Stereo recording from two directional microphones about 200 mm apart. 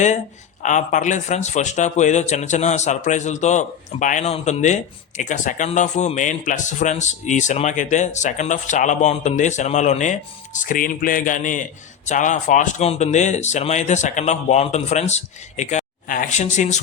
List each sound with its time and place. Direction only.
0.6 s speech: 40° left (ahead or behind)